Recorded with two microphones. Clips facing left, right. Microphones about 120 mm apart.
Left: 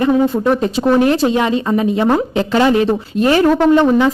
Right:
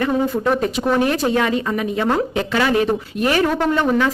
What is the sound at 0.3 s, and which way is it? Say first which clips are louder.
Speech: left 4 dB; 25° left (ahead or behind).